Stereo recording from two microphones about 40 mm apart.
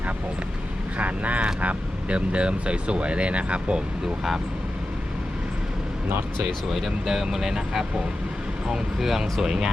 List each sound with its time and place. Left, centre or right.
0.9 s speech: right
6.8 s speech: centre